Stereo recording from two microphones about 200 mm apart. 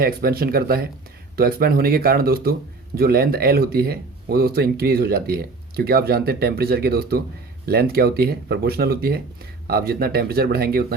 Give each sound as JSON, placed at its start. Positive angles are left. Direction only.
{"t": 0.0, "sound": "speech", "side_deg": -50}